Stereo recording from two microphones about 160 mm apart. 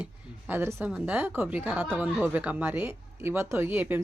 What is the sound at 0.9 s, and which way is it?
A woman's voice, 10° right (ahead or behind).